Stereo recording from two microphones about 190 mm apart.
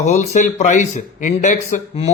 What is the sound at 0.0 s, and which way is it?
A man's voice, 40° left (ahead or behind).